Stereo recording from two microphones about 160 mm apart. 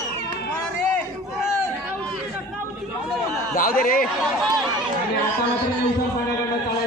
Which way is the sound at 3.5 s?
65° left (ahead or behind).